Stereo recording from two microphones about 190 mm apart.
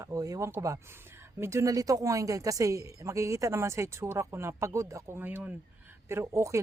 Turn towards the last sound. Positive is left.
turn(degrees=-15)  # may be behind; listen again after turning